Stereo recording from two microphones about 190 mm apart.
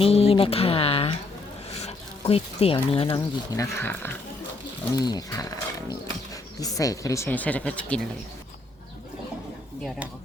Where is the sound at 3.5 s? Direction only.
15° left (ahead or behind).